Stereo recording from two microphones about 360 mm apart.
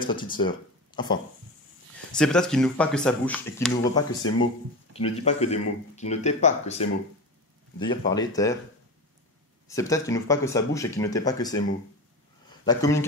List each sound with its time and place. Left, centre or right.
0.0 s speech: centre
2.1 s speech: centre
7.9 s speech: centre
9.7 s speech: centre
12.4 s a sound: centre